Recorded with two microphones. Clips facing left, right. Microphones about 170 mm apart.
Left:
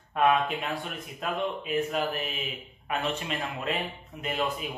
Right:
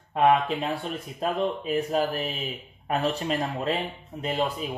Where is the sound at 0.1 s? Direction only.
25° right (ahead or behind).